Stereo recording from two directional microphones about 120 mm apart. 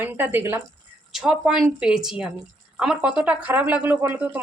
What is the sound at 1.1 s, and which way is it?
Speech, 5° right (ahead or behind).